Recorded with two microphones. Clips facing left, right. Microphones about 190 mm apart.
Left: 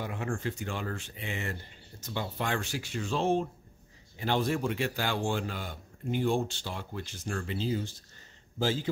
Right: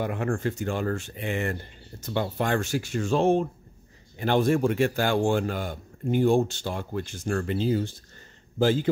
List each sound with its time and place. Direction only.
0.0 s a man's voice: 55° right (ahead or behind)